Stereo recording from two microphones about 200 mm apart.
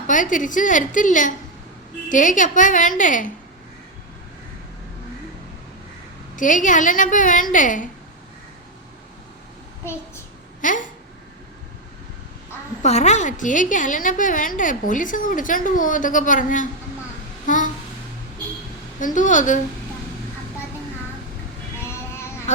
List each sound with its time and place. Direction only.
0.1 s a woman's voice: 40° left (ahead or behind)
6.3 s a woman's voice: 40° left (ahead or behind)
10.6 s speech: 40° left (ahead or behind)
12.8 s a woman's voice: 35° left (ahead or behind)
17.4 s a sound: 40° left (ahead or behind)
18.9 s a woman's voice: 40° left (ahead or behind)
21.8 s child singing: 15° left (ahead or behind)
22.5 s a sound: 35° left (ahead or behind)